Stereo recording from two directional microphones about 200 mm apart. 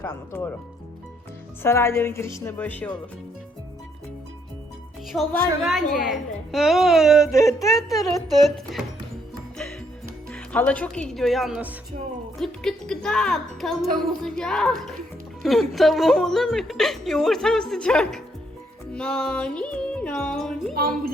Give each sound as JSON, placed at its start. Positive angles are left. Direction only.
{"t": 0.0, "sound": "a woman's voice", "side_deg": 10}
{"t": 1.6, "sound": "a woman's voice", "side_deg": 10}
{"t": 5.1, "sound": "a woman's voice", "side_deg": 0}
{"t": 10.3, "sound": "a woman's voice", "side_deg": 10}
{"t": 18.9, "sound": "music", "side_deg": 5}
{"t": 20.7, "sound": "wind chime", "side_deg": -45}